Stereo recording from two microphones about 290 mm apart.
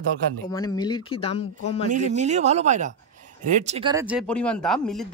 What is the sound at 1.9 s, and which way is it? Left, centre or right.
Speech, right.